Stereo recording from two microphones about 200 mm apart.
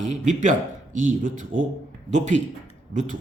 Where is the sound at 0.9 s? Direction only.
40° right (ahead or behind).